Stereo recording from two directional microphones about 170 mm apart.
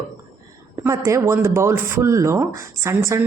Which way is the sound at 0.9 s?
15° right (ahead or behind).